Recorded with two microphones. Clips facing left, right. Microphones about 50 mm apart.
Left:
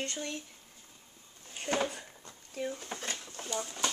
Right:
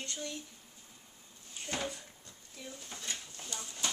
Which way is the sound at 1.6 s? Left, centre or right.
Left.